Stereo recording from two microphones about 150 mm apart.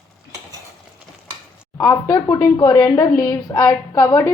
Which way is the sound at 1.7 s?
25° left (ahead or behind).